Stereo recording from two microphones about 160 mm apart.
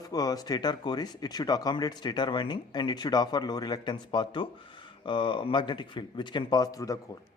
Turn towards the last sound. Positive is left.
turn(degrees=20)  # may be behind; listen again after turning